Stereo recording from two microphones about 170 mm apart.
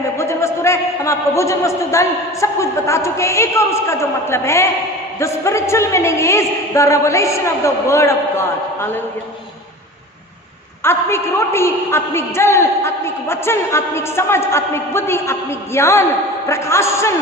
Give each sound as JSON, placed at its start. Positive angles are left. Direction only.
{"t": 0.2, "sound": "a man's voice", "side_deg": 15}
{"t": 10.8, "sound": "a man's voice", "side_deg": 15}